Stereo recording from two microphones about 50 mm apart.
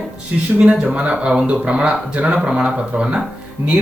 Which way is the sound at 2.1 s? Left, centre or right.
Right.